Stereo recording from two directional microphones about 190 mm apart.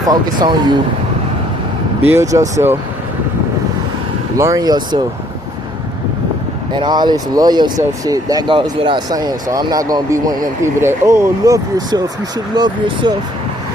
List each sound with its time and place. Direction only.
0.0 s speech: 20° right (ahead or behind)
2.0 s speech: 15° right (ahead or behind)
4.4 s speech: 15° right (ahead or behind)
6.7 s speech: 20° right (ahead or behind)